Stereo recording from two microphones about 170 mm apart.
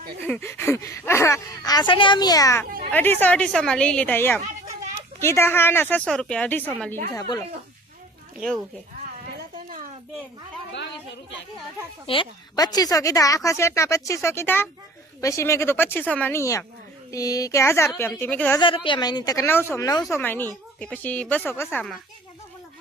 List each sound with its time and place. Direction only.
0.2 s speech: 10° left (ahead or behind)
7.1 s a woman's voice: 20° left (ahead or behind)
8.4 s speech: centre (ahead or behind)
12.0 s a woman's voice: 30° left (ahead or behind); by 18.6 s 10° left (ahead or behind)
18.6 s a woman's voice: 30° left (ahead or behind); by 21.8 s 10° left (ahead or behind)